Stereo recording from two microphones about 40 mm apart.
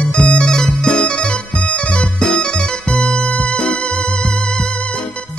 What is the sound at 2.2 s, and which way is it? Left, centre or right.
Music, centre.